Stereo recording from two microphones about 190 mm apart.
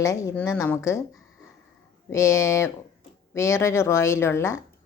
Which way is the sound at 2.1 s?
15° left (ahead or behind).